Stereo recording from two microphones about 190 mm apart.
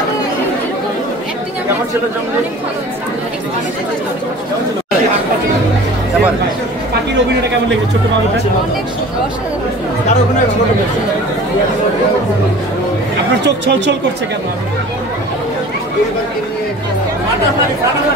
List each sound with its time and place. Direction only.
13.7 s a woman's voice: 65° right (ahead or behind)